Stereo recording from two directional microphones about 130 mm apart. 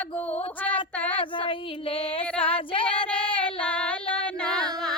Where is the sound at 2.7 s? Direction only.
45° left (ahead or behind).